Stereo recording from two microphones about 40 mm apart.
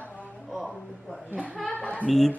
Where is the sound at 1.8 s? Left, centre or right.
Left.